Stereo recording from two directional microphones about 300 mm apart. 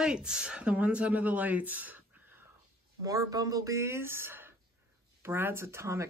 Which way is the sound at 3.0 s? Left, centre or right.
Centre.